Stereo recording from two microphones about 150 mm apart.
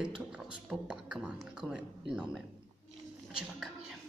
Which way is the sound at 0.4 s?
5° right (ahead or behind).